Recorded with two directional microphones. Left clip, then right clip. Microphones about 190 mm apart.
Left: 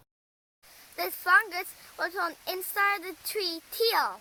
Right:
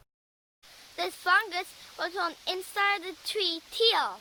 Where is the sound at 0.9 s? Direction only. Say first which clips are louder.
Left 2 dB; 5° left (ahead or behind).